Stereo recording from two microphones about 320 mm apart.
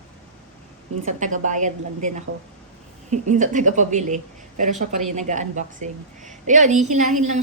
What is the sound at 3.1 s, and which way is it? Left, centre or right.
A woman's voice, right.